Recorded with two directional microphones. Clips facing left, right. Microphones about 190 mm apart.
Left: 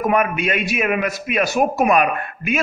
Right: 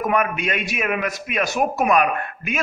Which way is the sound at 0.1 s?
10° left (ahead or behind).